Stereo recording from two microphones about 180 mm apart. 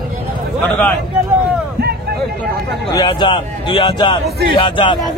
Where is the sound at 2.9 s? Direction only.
25° left (ahead or behind).